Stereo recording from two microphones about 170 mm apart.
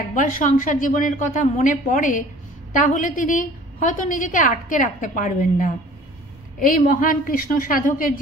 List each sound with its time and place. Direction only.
0.1 s a woman's voice: 50° left (ahead or behind)